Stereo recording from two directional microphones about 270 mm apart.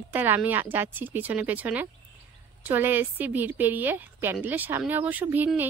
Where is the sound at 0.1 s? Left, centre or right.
Centre.